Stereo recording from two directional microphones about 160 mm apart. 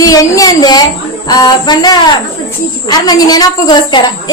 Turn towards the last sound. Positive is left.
turn(degrees=30)  # may be behind; listen again after turning